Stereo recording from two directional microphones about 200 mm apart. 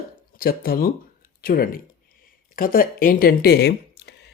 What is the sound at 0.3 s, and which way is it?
Speech, 45° left (ahead or behind).